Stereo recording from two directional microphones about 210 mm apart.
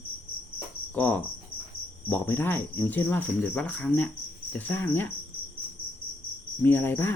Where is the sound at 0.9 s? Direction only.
10° left (ahead or behind).